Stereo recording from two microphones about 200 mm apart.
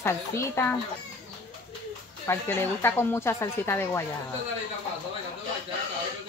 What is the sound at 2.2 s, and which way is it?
A woman's voice, 10° left (ahead or behind).